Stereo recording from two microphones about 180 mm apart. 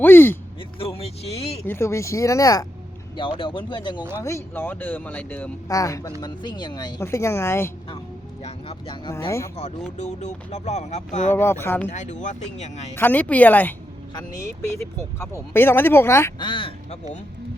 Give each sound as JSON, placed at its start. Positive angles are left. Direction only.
{"t": 0.0, "sound": "speech", "side_deg": 10}
{"t": 0.8, "sound": "speech", "side_deg": 35}
{"t": 1.6, "sound": "speech", "side_deg": 15}
{"t": 4.2, "sound": "speech", "side_deg": 15}
{"t": 8.4, "sound": "speech", "side_deg": 30}
{"t": 10.0, "sound": "speech", "side_deg": 40}
{"t": 11.3, "sound": "speech", "side_deg": 15}
{"t": 11.9, "sound": "speech", "side_deg": 40}
{"t": 12.9, "sound": "speech", "side_deg": 10}
{"t": 15.2, "sound": "speech", "side_deg": 15}
{"t": 16.4, "sound": "speech", "side_deg": 30}